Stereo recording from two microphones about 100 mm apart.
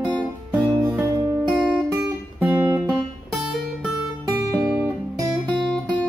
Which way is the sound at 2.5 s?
15° right (ahead or behind).